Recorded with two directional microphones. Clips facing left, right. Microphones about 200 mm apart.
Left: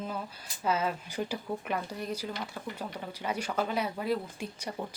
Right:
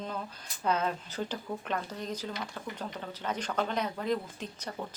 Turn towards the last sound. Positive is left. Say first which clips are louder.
# left 2 dB
turn(degrees=10)  # may be behind; listen again after turning